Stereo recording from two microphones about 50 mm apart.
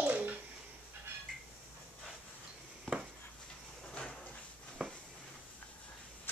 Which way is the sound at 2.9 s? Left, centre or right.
Centre.